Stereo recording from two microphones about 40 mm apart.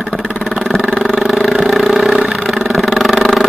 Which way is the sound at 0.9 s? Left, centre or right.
Centre.